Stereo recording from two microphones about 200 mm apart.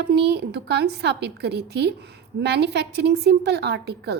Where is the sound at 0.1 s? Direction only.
55° right (ahead or behind).